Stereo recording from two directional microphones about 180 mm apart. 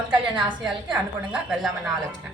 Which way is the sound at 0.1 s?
25° right (ahead or behind).